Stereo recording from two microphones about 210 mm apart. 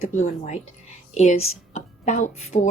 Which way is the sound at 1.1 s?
30° left (ahead or behind).